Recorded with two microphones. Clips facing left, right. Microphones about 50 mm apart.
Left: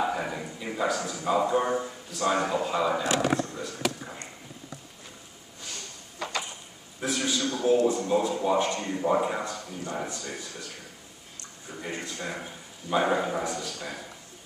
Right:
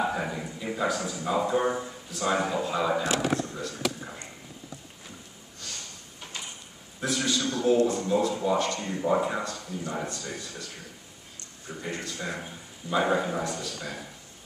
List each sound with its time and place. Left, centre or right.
0.0 s speech: centre
6.1 s a sound: left
7.1 s speech: centre
8.8 s speech: centre
10.0 s speech: centre
11.8 s speech: centre
12.3 s speech: centre
13.4 s speech: centre
13.7 s speech: centre